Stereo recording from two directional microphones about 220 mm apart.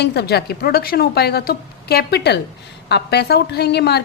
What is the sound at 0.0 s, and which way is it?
A woman's voice, 50° left (ahead or behind).